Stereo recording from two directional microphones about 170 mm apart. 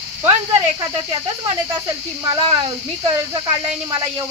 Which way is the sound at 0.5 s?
25° right (ahead or behind).